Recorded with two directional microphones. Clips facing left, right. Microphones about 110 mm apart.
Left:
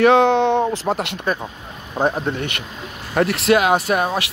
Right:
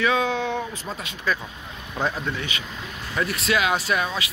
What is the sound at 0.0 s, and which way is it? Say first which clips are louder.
Speech: left 9 dB; 65° left (ahead or behind).